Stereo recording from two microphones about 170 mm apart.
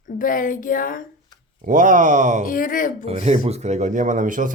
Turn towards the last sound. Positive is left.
turn(degrees=-50)  # may be behind; listen again after turning